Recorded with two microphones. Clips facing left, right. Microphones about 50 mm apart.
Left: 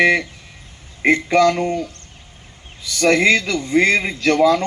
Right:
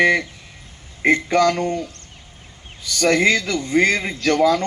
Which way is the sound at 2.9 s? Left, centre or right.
Centre.